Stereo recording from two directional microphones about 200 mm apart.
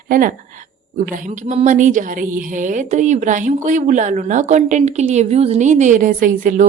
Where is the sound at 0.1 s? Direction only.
45° right (ahead or behind).